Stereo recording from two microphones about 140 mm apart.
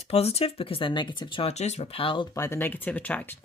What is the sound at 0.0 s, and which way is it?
Speech, 45° left (ahead or behind).